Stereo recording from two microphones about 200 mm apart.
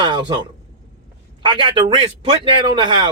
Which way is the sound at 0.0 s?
20° right (ahead or behind).